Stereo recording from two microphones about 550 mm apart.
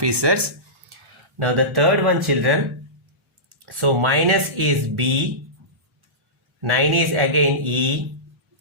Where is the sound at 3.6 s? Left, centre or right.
Right.